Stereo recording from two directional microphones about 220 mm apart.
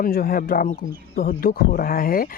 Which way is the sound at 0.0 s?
40° left (ahead or behind).